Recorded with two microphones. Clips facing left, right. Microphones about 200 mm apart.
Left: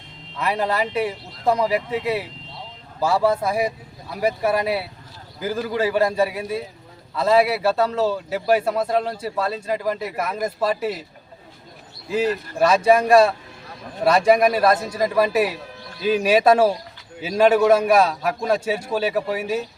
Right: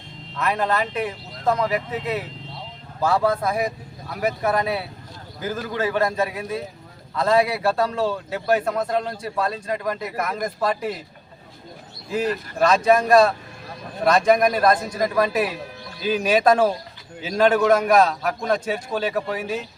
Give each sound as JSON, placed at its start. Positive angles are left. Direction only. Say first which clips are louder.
{"t": 0.3, "sound": "a man's voice", "louder": "even", "side_deg": 10}
{"t": 9.7, "sound": "speech", "louder": "left 2 dB", "side_deg": 30}
{"t": 10.2, "sound": "a man's voice", "louder": "left 1 dB", "side_deg": 5}
{"t": 12.1, "sound": "a man's voice", "louder": "left 2 dB", "side_deg": 5}